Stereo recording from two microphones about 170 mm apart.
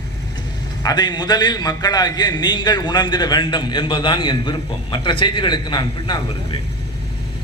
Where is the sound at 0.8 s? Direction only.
25° left (ahead or behind).